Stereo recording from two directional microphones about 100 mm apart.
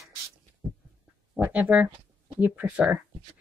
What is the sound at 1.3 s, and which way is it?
A woman's voice, 15° right (ahead or behind).